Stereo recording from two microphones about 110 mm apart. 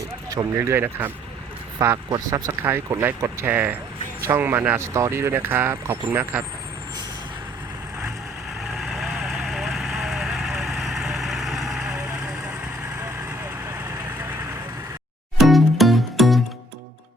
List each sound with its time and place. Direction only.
0.3 s speech: 25° right (ahead or behind)
8.6 s vehicle: centre (ahead or behind)
15.4 s music: centre (ahead or behind)